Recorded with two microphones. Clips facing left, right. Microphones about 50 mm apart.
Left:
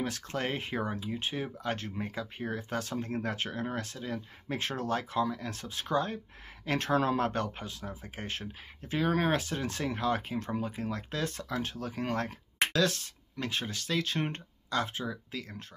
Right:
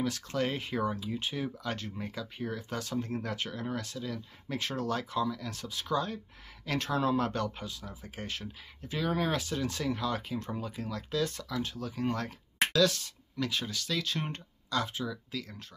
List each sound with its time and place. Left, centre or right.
0.0 s speech: left